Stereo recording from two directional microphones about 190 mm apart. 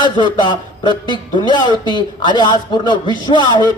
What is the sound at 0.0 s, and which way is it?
A man's voice, 25° left (ahead or behind).